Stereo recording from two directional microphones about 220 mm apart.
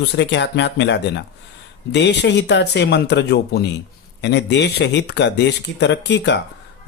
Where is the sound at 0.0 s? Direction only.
55° left (ahead or behind).